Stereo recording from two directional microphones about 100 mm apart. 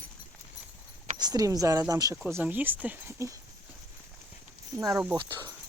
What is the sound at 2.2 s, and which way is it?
Speech, 20° right (ahead or behind).